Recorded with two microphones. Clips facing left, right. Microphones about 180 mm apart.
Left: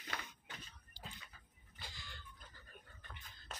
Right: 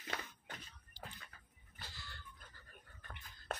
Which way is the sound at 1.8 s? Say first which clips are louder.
Even; 15° left (ahead or behind).